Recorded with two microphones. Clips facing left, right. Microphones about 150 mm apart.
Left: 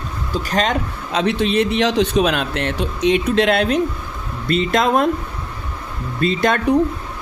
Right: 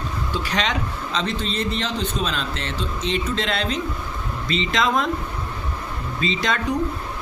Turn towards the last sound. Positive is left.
turn(degrees=55)  # may be behind; listen again after turning